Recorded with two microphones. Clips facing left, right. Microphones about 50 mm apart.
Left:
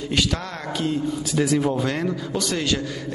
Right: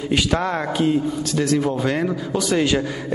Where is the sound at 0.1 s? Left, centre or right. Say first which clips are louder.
Right 5 dB; centre.